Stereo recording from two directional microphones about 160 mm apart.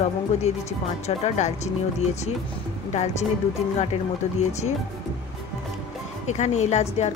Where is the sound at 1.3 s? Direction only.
45° left (ahead or behind).